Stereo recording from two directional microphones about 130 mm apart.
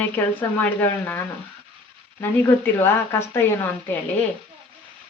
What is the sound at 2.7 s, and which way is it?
Speech, 20° left (ahead or behind).